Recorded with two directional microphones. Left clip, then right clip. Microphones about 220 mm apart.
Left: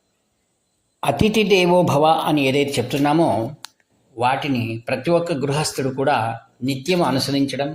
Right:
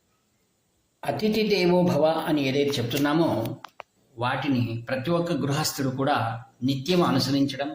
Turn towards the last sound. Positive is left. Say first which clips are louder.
# left 4 dB
turn(degrees=25)  # may be behind; listen again after turning